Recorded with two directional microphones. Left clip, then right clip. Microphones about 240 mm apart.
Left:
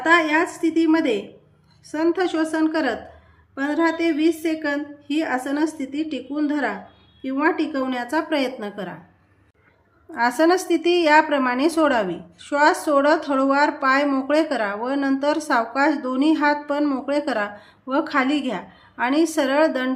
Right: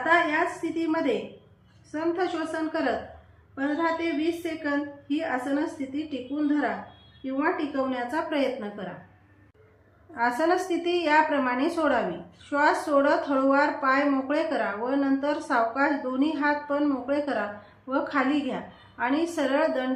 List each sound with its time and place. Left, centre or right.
0.0 s a woman's voice: left
10.2 s a woman's voice: left